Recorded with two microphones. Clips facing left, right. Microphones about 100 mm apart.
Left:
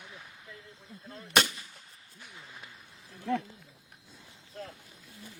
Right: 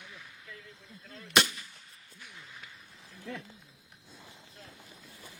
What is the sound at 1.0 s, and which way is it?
Gunshot, 30° left (ahead or behind).